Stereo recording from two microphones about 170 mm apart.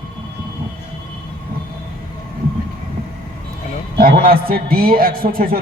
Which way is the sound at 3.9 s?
60° right (ahead or behind).